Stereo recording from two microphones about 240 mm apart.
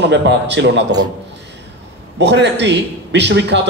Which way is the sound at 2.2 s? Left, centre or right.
Right.